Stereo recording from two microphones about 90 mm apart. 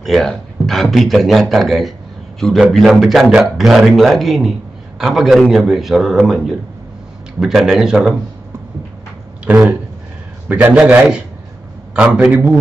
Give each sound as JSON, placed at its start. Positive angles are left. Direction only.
{"t": 0.0, "sound": "a man's voice", "side_deg": 5}
{"t": 9.5, "sound": "a man's voice", "side_deg": -15}